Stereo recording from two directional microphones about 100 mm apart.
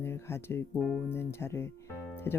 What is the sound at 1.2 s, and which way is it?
Speech, 25° left (ahead or behind).